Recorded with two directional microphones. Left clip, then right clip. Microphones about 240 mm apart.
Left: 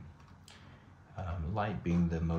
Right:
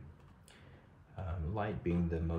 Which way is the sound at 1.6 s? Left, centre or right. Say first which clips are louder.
Left 2 dB; centre.